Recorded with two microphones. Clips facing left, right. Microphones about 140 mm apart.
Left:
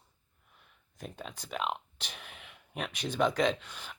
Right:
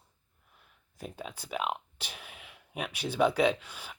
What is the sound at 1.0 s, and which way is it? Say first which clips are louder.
Speech: right 2 dB; 5° right (ahead or behind).